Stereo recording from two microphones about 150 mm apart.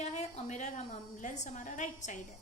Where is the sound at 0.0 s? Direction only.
50° left (ahead or behind).